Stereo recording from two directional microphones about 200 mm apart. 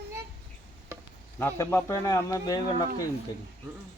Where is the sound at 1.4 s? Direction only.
10° left (ahead or behind).